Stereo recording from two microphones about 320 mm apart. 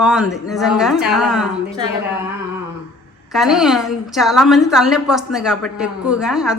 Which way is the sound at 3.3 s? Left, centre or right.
Centre.